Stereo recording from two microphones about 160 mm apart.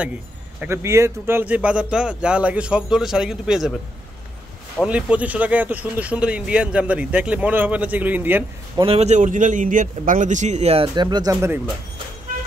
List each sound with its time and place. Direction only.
0.6 s speech: 15° right (ahead or behind)
4.8 s speech: 10° right (ahead or behind)
8.7 s a man's voice: 35° right (ahead or behind)